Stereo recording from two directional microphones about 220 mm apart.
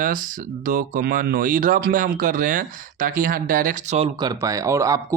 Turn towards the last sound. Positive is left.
turn(degrees=-15)  # may be behind; listen again after turning